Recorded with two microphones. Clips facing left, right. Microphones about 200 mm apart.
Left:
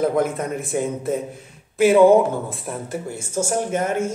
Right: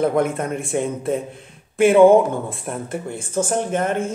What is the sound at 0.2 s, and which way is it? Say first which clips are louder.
Speech: right 1 dB; 55° right (ahead or behind).